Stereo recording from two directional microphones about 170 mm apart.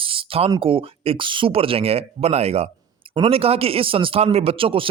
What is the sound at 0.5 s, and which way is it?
Speech, 30° right (ahead or behind).